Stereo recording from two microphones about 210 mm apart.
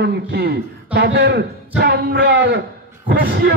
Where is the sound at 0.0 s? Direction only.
50° right (ahead or behind).